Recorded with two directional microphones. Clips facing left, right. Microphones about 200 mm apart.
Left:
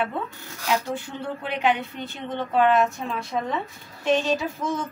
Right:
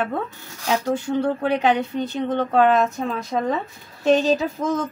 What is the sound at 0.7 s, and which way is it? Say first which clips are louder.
A woman's voice: right 5 dB; 40° right (ahead or behind).